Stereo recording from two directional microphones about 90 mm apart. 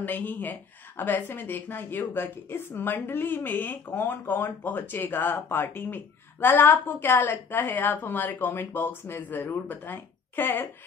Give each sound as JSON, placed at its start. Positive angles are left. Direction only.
{"t": 0.0, "sound": "a woman's voice", "side_deg": 20}